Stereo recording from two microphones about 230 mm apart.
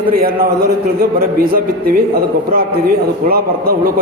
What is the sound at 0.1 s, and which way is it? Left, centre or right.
A man's voice, right.